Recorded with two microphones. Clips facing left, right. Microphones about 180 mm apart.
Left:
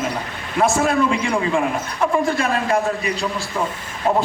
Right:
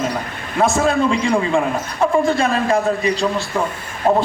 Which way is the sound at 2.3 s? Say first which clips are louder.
Right 3 dB; 30° right (ahead or behind).